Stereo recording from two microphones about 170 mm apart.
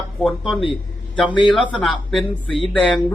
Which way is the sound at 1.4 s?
30° left (ahead or behind).